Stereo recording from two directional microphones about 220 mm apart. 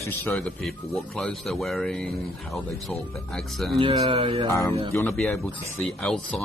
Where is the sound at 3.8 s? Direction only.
25° right (ahead or behind).